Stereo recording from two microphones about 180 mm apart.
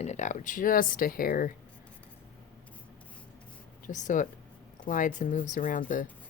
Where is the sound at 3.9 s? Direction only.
45° left (ahead or behind).